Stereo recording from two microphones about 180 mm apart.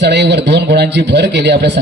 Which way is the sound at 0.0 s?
70° right (ahead or behind).